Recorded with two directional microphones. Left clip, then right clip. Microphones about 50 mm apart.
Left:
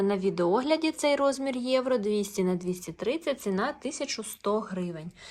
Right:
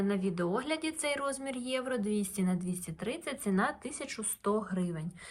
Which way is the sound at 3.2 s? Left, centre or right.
Left.